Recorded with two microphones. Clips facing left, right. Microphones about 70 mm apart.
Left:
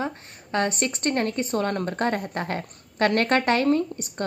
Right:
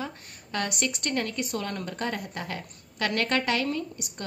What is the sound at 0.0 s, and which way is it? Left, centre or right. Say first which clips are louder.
A woman's voice: left 6 dB; left.